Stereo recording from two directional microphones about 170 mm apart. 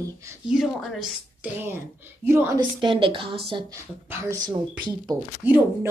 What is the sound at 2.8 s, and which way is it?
Speech, 30° right (ahead or behind).